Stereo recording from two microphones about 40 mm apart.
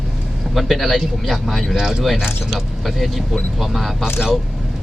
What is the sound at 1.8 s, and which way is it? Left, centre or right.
Speech, centre.